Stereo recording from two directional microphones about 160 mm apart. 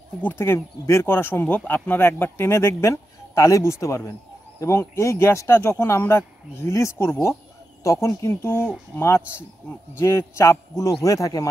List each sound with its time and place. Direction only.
0.2 s speech: 15° left (ahead or behind)